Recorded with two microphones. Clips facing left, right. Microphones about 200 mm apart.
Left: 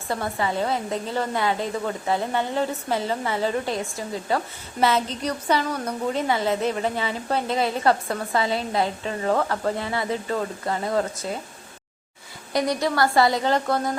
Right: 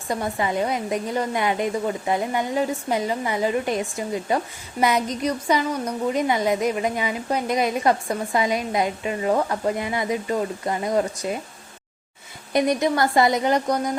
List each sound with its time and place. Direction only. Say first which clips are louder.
0.1 s a woman's voice: right 2 dB; 15° right (ahead or behind)
12.5 s a woman's voice: right 2 dB; 20° right (ahead or behind)